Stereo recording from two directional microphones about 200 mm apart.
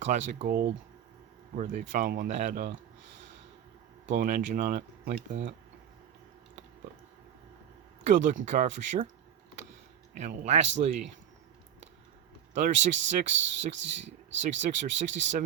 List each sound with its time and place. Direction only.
0.0 s speech: 40° right (ahead or behind)
4.0 s speech: 50° right (ahead or behind)
8.0 s speech: 40° right (ahead or behind)
10.2 s speech: 35° right (ahead or behind)
12.5 s speech: 35° right (ahead or behind)
13.7 s speech: 65° right (ahead or behind)
14.6 s speech: 35° right (ahead or behind)